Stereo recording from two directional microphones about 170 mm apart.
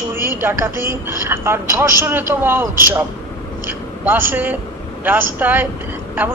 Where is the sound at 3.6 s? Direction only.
10° right (ahead or behind).